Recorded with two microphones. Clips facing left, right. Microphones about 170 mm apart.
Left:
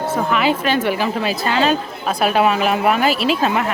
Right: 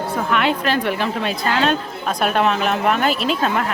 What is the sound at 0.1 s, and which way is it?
A woman's voice, centre (ahead or behind).